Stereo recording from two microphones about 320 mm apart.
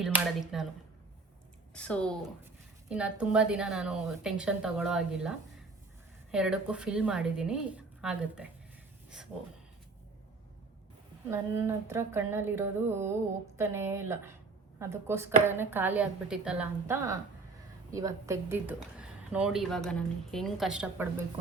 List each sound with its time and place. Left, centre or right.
0.0 s a woman's voice: centre
1.7 s a woman's voice: centre
11.3 s a woman's voice: centre